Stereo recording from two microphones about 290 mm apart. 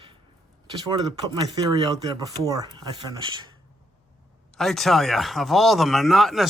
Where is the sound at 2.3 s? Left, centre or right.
Centre.